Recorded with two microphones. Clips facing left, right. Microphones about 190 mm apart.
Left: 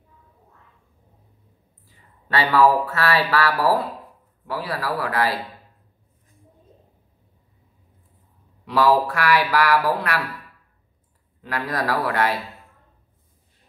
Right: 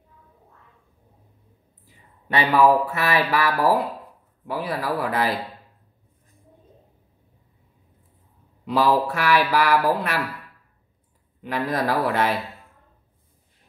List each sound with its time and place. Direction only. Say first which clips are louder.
1.9 s speech: even; 20° right (ahead or behind)
8.7 s speech: left 2 dB; 20° right (ahead or behind)
11.4 s speech: right 2 dB; 20° right (ahead or behind)